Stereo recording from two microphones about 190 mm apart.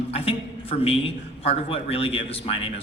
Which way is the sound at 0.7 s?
30° left (ahead or behind).